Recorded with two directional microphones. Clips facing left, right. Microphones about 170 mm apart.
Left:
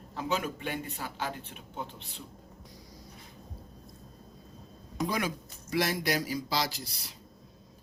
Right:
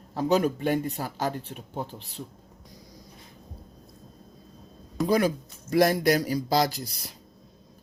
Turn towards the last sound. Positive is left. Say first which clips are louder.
# right 7 dB
turn(degrees=-45)  # may be behind; listen again after turning